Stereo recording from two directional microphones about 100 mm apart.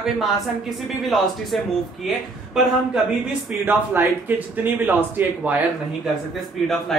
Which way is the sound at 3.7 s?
20° right (ahead or behind).